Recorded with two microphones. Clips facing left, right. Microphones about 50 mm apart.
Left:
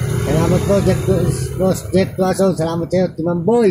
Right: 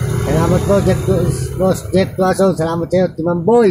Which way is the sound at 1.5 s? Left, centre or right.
Right.